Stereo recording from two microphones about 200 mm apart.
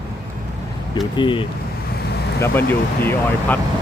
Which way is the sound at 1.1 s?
25° left (ahead or behind).